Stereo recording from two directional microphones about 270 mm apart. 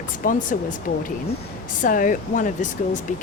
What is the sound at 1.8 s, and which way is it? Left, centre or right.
Speech, left.